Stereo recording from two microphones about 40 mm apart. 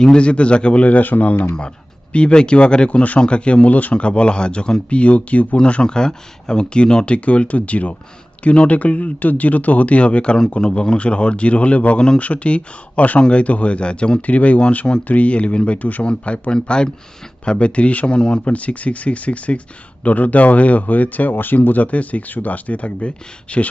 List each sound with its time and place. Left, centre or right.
0.2 s speech: left
3.9 s speech: left
4.9 s speech: left
5.5 s speech: left
11.9 s speech: left
12.2 s speech: left
14.2 s speech: left
16.0 s speech: left
18.4 s speech: left